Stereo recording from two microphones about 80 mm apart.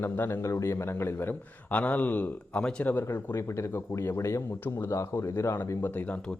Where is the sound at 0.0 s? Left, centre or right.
Left.